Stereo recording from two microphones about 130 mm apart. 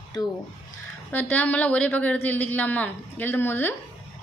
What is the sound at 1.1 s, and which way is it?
A woman's voice, 15° left (ahead or behind).